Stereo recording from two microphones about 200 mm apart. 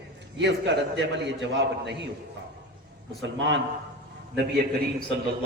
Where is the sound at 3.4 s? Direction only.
60° right (ahead or behind).